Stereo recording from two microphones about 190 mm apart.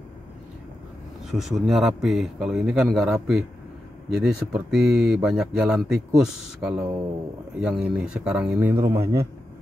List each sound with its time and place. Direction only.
1.3 s speech: centre (ahead or behind)